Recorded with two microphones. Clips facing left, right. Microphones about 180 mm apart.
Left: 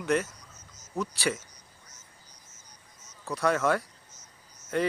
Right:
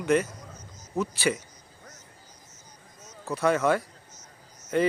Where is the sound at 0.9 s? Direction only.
Centre (ahead or behind).